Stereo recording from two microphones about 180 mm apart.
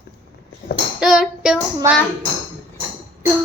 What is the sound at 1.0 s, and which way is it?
Child singing, 5° right (ahead or behind).